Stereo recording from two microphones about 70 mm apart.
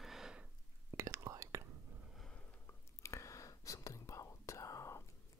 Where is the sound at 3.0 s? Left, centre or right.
Left.